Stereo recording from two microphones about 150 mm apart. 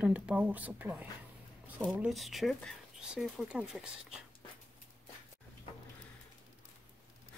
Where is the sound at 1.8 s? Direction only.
Centre (ahead or behind).